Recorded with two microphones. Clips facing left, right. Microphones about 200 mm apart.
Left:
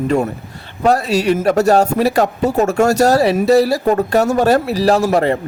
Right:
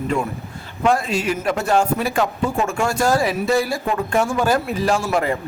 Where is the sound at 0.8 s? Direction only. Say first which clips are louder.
Left 5 dB; 40° left (ahead or behind).